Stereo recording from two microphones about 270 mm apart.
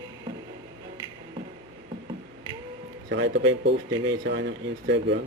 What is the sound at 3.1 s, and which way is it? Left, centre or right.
Speech, right.